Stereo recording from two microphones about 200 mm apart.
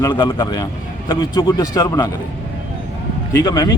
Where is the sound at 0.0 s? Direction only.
25° left (ahead or behind).